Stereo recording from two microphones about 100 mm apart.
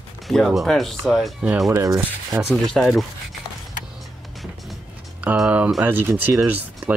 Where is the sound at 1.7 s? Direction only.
25° right (ahead or behind).